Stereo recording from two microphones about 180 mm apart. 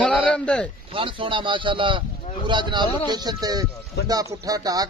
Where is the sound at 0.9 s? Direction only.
30° right (ahead or behind).